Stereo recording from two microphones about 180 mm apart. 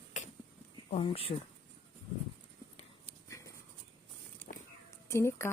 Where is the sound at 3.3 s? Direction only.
15° left (ahead or behind).